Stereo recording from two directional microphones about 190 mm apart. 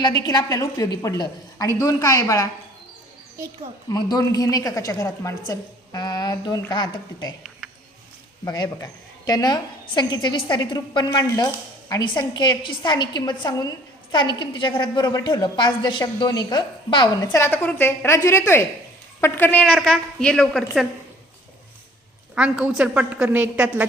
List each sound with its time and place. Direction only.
0.0 s a woman's voice: 20° left (ahead or behind)
3.8 s a woman's voice: 20° left (ahead or behind)
8.4 s a woman's voice: 20° left (ahead or behind); by 20.8 s centre (ahead or behind)
22.4 s a woman's voice: 5° right (ahead or behind)